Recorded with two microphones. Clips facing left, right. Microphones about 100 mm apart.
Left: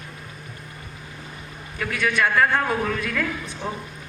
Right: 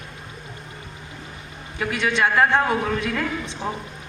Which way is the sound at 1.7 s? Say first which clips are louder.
Right 1 dB; 25° right (ahead or behind).